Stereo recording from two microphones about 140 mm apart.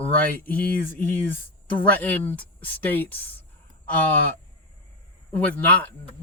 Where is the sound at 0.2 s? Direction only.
10° left (ahead or behind).